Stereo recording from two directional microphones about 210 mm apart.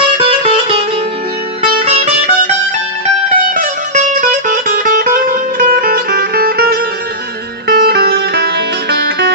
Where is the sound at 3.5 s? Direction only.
35° right (ahead or behind).